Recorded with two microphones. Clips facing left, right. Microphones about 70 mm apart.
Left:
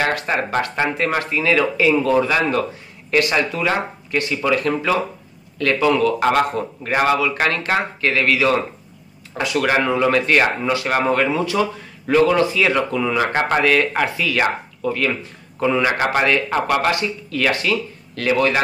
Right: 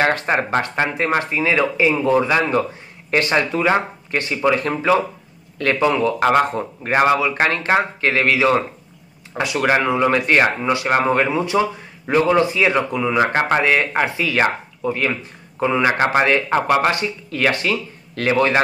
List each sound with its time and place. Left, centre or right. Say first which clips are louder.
0.0 s a man's voice: right 2 dB; right